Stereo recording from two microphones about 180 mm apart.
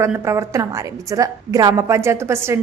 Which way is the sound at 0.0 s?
15° right (ahead or behind).